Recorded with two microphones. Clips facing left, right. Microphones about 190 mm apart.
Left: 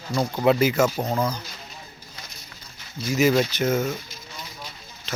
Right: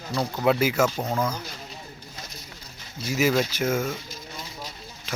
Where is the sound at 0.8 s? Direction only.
10° left (ahead or behind).